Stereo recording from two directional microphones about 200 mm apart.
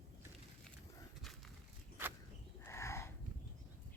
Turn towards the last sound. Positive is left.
turn(degrees=15)  # may be behind; listen again after turning